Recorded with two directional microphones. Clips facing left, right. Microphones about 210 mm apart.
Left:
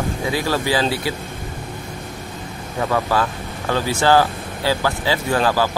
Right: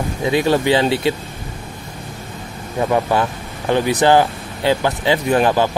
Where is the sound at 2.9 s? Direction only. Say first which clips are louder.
Right 2 dB; 20° right (ahead or behind).